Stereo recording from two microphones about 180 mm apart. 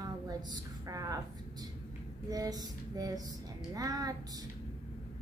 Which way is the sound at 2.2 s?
20° right (ahead or behind).